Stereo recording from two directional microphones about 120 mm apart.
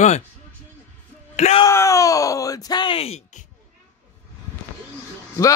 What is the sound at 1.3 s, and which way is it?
Yell, 65° left (ahead or behind).